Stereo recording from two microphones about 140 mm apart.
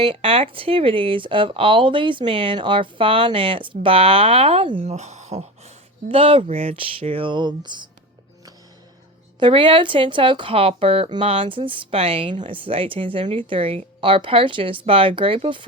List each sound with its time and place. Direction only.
0.1 s speech: 40° right (ahead or behind)
4.9 s speech: 55° right (ahead or behind); by 7.9 s 30° right (ahead or behind)
9.4 s speech: 40° right (ahead or behind)
12.5 s speech: 40° right (ahead or behind)